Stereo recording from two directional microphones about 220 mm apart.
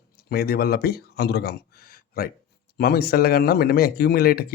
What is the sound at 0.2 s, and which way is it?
Speech, 45° left (ahead or behind).